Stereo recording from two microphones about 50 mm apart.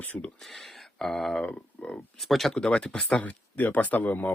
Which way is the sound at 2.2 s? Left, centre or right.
Centre.